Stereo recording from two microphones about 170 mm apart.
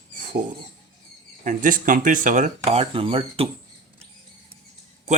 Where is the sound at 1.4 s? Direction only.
50° right (ahead or behind); by 3.4 s 35° right (ahead or behind).